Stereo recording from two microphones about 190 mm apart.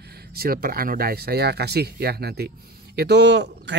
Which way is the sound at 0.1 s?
55° right (ahead or behind).